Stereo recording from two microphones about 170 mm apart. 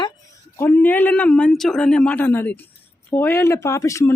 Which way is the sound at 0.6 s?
10° left (ahead or behind).